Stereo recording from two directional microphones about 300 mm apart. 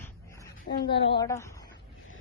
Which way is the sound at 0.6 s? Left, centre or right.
Left.